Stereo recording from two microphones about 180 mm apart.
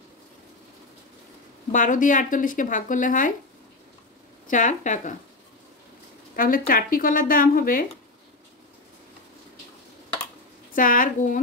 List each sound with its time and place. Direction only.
1.7 s speech: 45° left (ahead or behind)
4.5 s speech: 45° left (ahead or behind)
6.3 s speech: 50° left (ahead or behind)
10.7 s speech: 50° left (ahead or behind)